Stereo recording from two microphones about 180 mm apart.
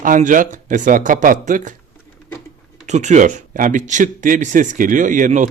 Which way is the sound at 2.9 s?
40° right (ahead or behind).